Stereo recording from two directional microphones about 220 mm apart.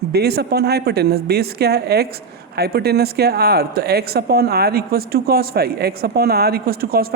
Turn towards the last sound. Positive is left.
turn(degrees=-45)  # may be behind; listen again after turning